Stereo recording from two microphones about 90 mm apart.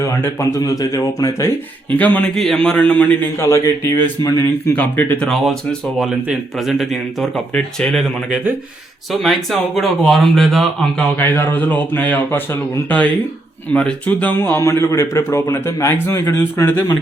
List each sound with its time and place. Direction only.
0.0 s speech: 35° left (ahead or behind)
2.0 s a man's voice: 20° left (ahead or behind)
2.3 s a man's voice: 5° left (ahead or behind)
3.3 s speech: 30° left (ahead or behind)
4.2 s a man's voice: 45° left (ahead or behind)
4.6 s speech: 20° left (ahead or behind)
6.0 s a man's voice: 5° right (ahead or behind)
9.2 s speech: centre (ahead or behind)
11.2 s a man's voice: 20° left (ahead or behind)